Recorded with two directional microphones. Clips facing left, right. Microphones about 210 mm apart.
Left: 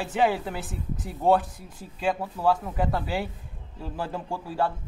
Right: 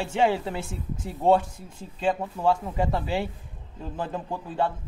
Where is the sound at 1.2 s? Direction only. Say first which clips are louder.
Right 1 dB; 25° right (ahead or behind).